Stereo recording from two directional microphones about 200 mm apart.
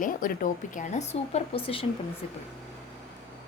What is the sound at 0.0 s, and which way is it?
Speech, 45° left (ahead or behind).